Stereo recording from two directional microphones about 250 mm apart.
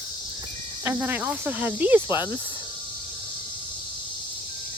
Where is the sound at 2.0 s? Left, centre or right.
Centre.